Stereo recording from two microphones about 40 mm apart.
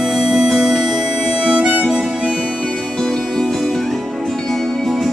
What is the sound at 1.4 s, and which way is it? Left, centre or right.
Harmonica, centre.